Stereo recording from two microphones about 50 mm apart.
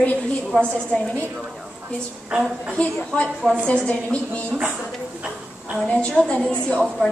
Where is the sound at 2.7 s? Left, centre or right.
Left.